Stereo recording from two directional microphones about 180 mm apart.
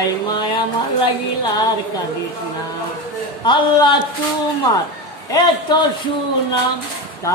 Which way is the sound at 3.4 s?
25° left (ahead or behind).